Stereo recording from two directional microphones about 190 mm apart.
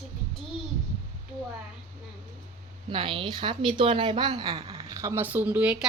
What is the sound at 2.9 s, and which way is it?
A woman's voice, 25° right (ahead or behind).